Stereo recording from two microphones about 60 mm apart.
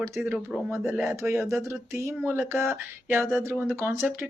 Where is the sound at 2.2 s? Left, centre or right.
Right.